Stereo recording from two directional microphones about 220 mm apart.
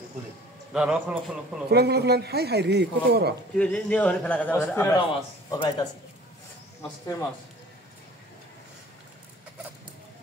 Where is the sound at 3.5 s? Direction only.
5° left (ahead or behind).